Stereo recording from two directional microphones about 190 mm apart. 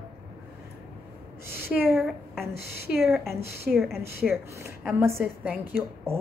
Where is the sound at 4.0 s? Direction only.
15° right (ahead or behind).